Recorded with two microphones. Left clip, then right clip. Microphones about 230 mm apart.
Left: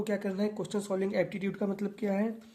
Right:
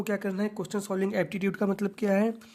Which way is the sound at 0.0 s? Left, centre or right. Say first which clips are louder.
Right 2 dB; right.